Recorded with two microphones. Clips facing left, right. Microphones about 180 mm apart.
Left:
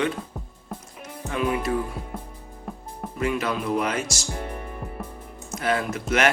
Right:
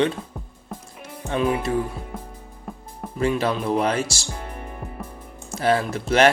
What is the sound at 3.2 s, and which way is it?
Speech, 30° right (ahead or behind).